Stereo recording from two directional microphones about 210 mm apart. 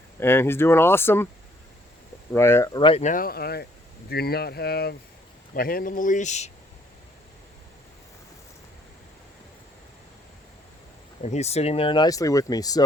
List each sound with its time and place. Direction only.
0.2 s speech: 10° left (ahead or behind)
2.3 s speech: 10° left (ahead or behind)
2.8 s speech: 30° left (ahead or behind)
11.2 s speech: 30° left (ahead or behind)